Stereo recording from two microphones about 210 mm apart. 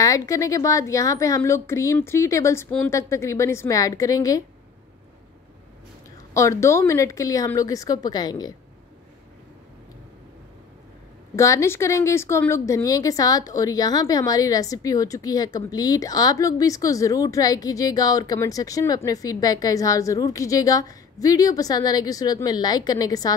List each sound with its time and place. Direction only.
0.0 s speech: 15° left (ahead or behind)
6.3 s speech: 15° left (ahead or behind)
11.3 s speech: 15° left (ahead or behind)